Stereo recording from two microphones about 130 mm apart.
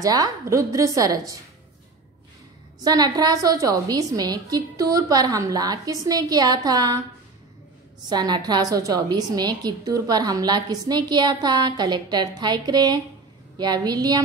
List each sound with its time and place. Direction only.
0.0 s a woman's voice: 25° right (ahead or behind)
2.8 s a woman's voice: 30° right (ahead or behind)
8.1 s a woman's voice: 35° right (ahead or behind)